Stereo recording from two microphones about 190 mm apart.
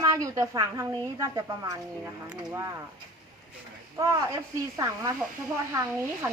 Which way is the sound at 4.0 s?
15° right (ahead or behind).